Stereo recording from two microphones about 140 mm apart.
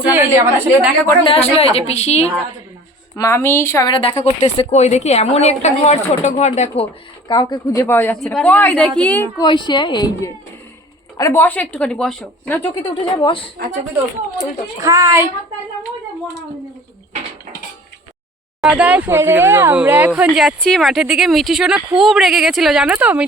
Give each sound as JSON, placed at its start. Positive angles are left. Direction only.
{"t": 0.1, "sound": "speech", "side_deg": -15}
{"t": 1.2, "sound": "a woman's voice", "side_deg": 45}
{"t": 3.2, "sound": "a woman's voice", "side_deg": 20}
{"t": 3.8, "sound": "speech", "side_deg": 35}
{"t": 4.4, "sound": "a woman's voice", "side_deg": 55}
{"t": 7.3, "sound": "a woman's voice", "side_deg": 30}
{"t": 7.9, "sound": "a woman's voice", "side_deg": 15}
{"t": 9.4, "sound": "a woman's voice", "side_deg": 35}
{"t": 12.9, "sound": "speech", "side_deg": 35}
{"t": 14.8, "sound": "a woman's voice", "side_deg": -20}
{"t": 18.6, "sound": "speech", "side_deg": -10}